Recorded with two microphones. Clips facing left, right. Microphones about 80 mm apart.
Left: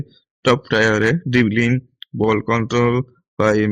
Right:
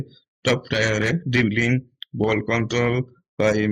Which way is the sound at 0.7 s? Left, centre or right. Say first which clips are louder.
Left 6 dB; left.